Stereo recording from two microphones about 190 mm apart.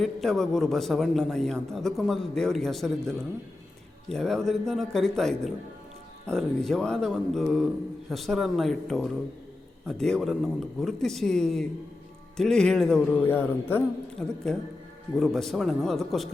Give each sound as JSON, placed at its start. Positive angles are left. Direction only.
{"t": 0.0, "sound": "a man's voice", "side_deg": 0}